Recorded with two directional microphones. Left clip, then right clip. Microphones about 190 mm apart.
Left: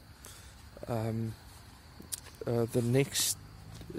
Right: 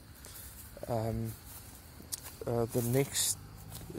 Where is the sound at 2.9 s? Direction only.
30° left (ahead or behind).